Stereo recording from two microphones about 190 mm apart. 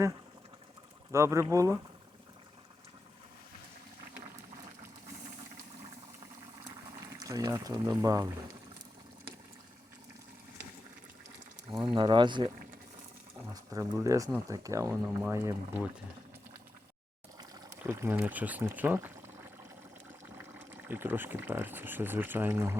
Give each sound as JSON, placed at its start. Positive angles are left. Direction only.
{"t": 1.1, "sound": "speech", "side_deg": -15}
{"t": 7.0, "sound": "speech", "side_deg": -20}
{"t": 11.7, "sound": "speech", "side_deg": -5}
{"t": 11.9, "sound": "speech", "side_deg": -25}
{"t": 13.5, "sound": "speech", "side_deg": -15}
{"t": 17.5, "sound": "speech", "side_deg": -15}
{"t": 20.4, "sound": "speech", "side_deg": -10}